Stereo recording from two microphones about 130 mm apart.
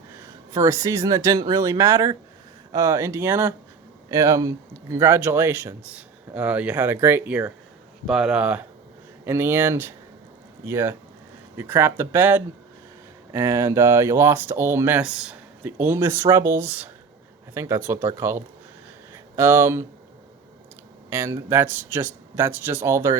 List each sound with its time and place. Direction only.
0.5 s speech: 25° right (ahead or behind)
21.1 s speech: 20° right (ahead or behind)